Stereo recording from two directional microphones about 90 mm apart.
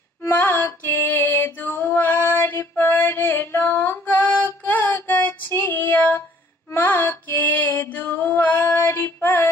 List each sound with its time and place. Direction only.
0.2 s female singing: 20° left (ahead or behind)
6.7 s music: 20° left (ahead or behind)